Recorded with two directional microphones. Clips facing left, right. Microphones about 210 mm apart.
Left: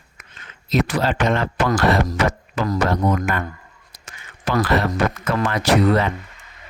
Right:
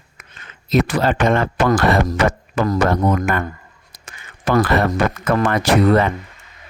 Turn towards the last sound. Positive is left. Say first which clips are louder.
# right 2 dB
turn(degrees=-55)  # may be behind; listen again after turning